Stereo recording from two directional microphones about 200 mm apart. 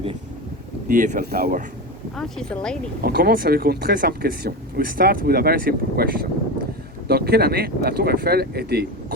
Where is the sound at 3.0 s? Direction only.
50° right (ahead or behind).